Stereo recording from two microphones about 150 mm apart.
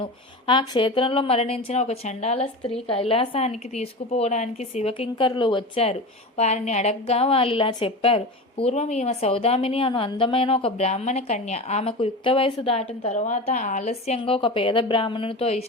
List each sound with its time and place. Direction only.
0.0 s speech: 30° left (ahead or behind); by 11.9 s 50° left (ahead or behind)
11.9 s a woman's voice: 35° left (ahead or behind); by 14.2 s 55° left (ahead or behind)
14.3 s speech: 35° left (ahead or behind)